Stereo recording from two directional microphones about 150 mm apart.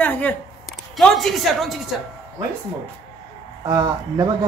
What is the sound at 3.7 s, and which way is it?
Speech, 25° right (ahead or behind).